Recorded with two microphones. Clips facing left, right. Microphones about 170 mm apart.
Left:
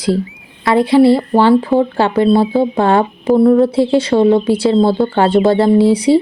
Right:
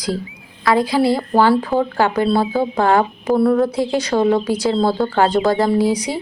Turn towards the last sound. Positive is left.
turn(degrees=30)  # may be behind; listen again after turning